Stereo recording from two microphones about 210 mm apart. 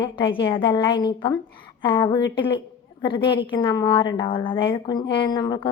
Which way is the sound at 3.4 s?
25° left (ahead or behind).